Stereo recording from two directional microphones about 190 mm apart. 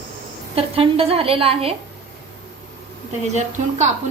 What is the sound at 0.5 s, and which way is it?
A woman's voice, 30° right (ahead or behind).